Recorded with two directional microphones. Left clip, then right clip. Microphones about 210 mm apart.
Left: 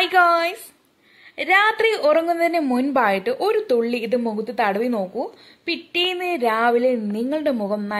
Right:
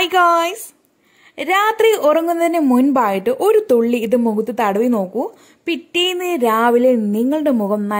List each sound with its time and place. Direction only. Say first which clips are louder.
0.0 s a woman's voice: right 3 dB; 40° right (ahead or behind)